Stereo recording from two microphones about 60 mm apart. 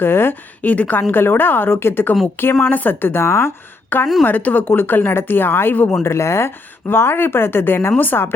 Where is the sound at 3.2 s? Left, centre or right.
Left.